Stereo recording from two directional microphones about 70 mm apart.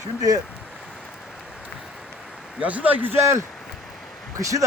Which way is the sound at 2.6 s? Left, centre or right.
Right.